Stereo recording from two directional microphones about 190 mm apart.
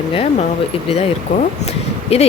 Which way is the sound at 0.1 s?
30° left (ahead or behind).